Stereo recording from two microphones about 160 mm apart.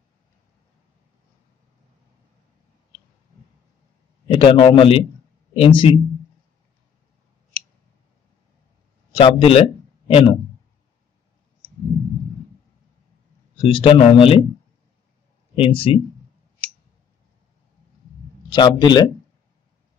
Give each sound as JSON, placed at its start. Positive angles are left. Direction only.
{"t": 4.3, "sound": "speech", "side_deg": 35}
{"t": 9.1, "sound": "speech", "side_deg": 35}
{"t": 13.6, "sound": "speech", "side_deg": 35}
{"t": 15.5, "sound": "speech", "side_deg": 35}
{"t": 18.5, "sound": "speech", "side_deg": 25}